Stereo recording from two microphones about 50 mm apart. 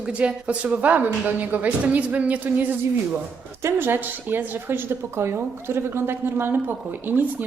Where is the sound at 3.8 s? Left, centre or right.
Right.